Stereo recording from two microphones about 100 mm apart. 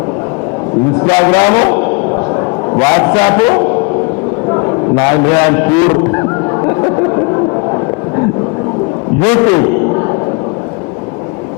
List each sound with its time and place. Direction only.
1.0 s a man's voice: 25° left (ahead or behind)
4.4 s a sound: 35° left (ahead or behind)
9.2 s speech: 25° left (ahead or behind)